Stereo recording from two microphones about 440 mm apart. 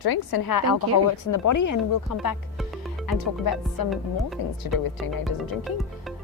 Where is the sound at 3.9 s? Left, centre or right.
Centre.